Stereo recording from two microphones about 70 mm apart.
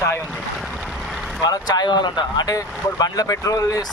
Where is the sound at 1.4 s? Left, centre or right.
Left.